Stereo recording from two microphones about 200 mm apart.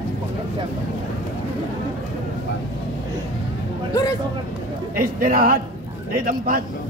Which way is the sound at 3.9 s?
15° left (ahead or behind).